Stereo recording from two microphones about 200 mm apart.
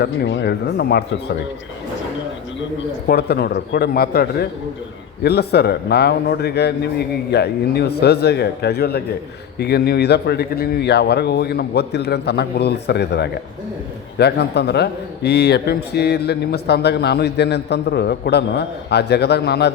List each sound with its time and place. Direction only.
0.0 s a man's voice: 60° left (ahead or behind)
3.1 s a man's voice: 55° left (ahead or behind)